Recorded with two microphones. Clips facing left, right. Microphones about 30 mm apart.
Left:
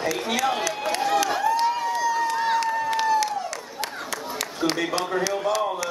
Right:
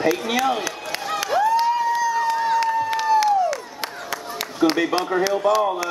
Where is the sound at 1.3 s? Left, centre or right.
Centre.